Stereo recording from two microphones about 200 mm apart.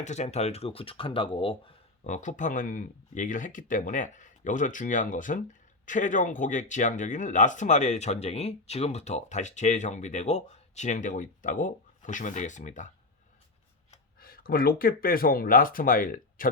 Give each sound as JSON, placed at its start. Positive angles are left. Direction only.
{"t": 0.0, "sound": "speech", "side_deg": 35}
{"t": 2.0, "sound": "speech", "side_deg": 40}
{"t": 14.2, "sound": "speech", "side_deg": 50}